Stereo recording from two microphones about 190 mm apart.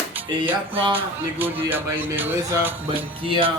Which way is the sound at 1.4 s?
10° right (ahead or behind).